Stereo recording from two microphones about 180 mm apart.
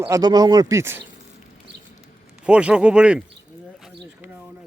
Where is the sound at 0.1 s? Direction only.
25° right (ahead or behind).